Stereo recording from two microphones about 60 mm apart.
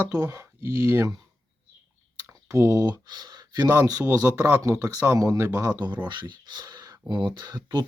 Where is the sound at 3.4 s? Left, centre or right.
Right.